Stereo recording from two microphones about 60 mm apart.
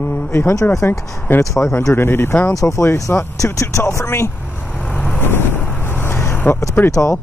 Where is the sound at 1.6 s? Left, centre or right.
Left.